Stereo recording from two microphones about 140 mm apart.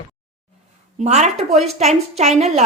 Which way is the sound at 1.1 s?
55° right (ahead or behind).